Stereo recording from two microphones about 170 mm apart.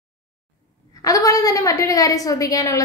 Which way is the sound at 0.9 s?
20° left (ahead or behind).